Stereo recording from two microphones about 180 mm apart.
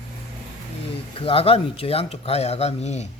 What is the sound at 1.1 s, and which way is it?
Speech, 30° left (ahead or behind).